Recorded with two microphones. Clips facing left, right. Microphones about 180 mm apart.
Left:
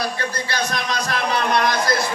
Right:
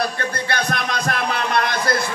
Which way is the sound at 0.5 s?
55° right (ahead or behind).